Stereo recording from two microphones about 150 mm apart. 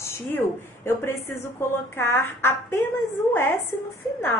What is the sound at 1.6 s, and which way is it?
A woman's voice, 15° left (ahead or behind).